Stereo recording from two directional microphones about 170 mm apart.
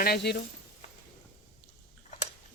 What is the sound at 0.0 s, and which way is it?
Speech, 75° left (ahead or behind).